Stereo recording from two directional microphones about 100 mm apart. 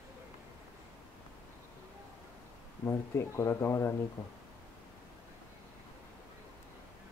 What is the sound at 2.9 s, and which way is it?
Speech, 25° left (ahead or behind).